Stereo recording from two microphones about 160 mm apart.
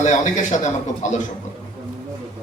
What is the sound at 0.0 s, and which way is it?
A man's voice, 50° left (ahead or behind).